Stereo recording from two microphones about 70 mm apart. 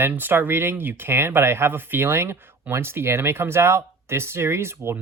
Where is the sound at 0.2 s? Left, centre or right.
Right.